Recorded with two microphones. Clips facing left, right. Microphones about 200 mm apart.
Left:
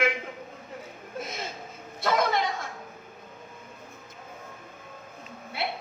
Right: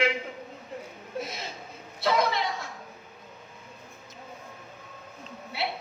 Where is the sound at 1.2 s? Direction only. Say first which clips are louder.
Left 1 dB; 50° left (ahead or behind).